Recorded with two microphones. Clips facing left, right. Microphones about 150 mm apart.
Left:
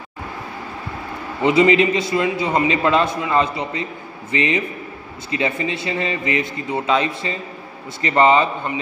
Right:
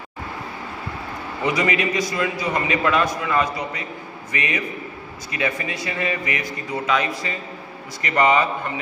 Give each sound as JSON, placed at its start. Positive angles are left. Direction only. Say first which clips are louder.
{"t": 1.4, "sound": "a man's voice", "louder": "left 7 dB", "side_deg": 25}